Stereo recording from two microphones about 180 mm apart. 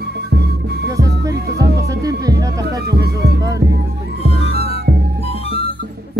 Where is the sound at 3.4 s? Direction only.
20° right (ahead or behind).